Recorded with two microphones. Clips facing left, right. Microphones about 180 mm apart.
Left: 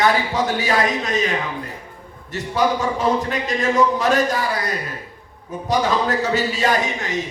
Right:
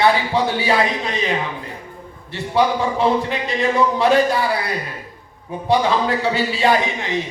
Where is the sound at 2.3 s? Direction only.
45° left (ahead or behind).